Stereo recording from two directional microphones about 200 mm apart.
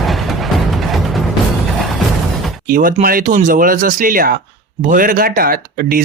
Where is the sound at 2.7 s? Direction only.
45° right (ahead or behind).